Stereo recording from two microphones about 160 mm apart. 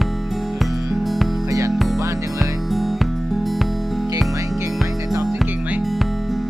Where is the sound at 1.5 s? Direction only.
20° right (ahead or behind).